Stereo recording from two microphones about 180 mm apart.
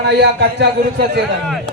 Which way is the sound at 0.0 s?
65° right (ahead or behind).